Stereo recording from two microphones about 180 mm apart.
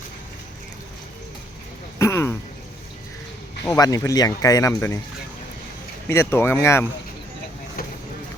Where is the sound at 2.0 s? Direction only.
15° left (ahead or behind).